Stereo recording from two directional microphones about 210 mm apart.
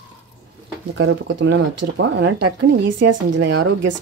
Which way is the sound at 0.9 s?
60° right (ahead or behind).